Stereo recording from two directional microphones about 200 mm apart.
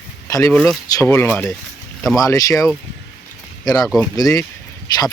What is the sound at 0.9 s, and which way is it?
Speech, 15° left (ahead or behind).